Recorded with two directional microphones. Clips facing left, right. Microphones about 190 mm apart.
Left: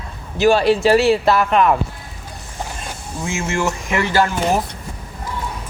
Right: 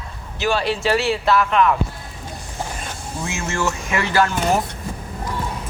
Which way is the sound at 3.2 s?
15° left (ahead or behind).